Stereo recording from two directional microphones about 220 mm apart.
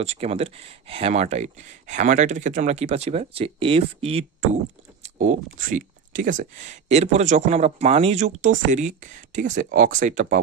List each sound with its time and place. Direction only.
0.0 s speech: 30° right (ahead or behind)